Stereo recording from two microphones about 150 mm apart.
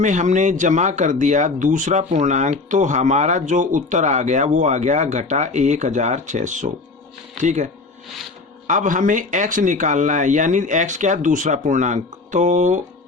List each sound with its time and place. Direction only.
0.0 s speech: 55° right (ahead or behind)